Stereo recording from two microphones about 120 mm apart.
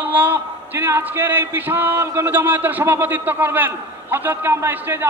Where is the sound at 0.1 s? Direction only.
15° right (ahead or behind).